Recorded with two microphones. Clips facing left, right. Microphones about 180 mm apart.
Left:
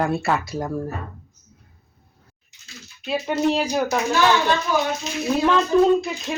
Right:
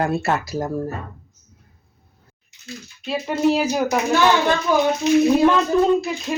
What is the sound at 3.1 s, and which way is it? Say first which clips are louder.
Speech: right 2 dB; centre (ahead or behind).